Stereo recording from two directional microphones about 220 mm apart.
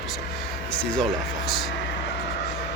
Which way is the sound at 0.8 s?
5° left (ahead or behind).